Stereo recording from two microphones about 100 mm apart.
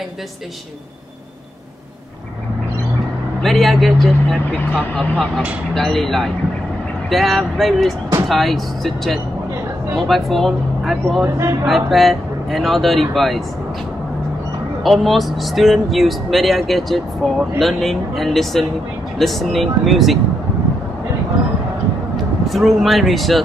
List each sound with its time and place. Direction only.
3.4 s speech: centre (ahead or behind)
5.8 s speech: 5° left (ahead or behind)
14.8 s speech: centre (ahead or behind)
22.1 s speech: centre (ahead or behind)